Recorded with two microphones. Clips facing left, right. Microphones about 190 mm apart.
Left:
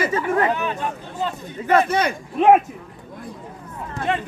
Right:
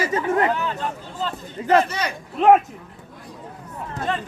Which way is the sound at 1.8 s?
55° left (ahead or behind).